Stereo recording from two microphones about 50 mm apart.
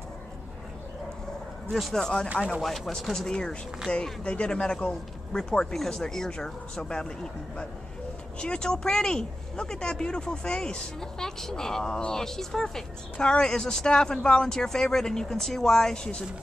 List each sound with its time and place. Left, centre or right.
1.7 s speech: centre
2.0 s speech: centre
2.6 s speech: centre